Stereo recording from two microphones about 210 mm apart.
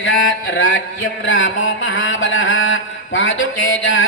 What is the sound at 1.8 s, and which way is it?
Mantra, 65° left (ahead or behind).